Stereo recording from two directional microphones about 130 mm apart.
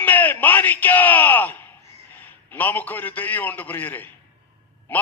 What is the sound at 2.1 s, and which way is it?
A man's voice, 15° left (ahead or behind).